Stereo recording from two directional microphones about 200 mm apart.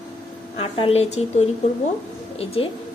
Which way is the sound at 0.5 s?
25° left (ahead or behind).